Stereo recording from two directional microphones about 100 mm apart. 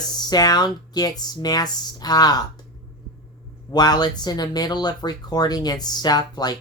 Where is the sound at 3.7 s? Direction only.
45° left (ahead or behind).